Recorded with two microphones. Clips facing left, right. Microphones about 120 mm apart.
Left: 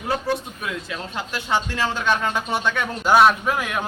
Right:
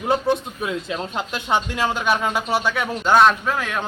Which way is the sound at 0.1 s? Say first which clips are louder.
Right 4 dB; 25° right (ahead or behind).